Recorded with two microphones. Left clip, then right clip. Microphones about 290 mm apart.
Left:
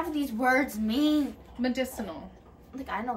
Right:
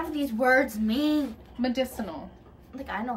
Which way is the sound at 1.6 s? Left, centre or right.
Centre.